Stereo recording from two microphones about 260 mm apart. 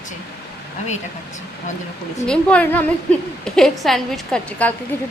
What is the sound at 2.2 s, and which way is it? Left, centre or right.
A woman's voice, centre.